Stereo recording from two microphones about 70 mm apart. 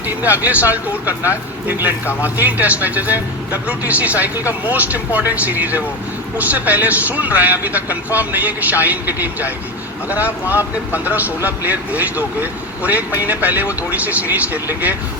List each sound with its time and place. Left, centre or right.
0.2 s speech: right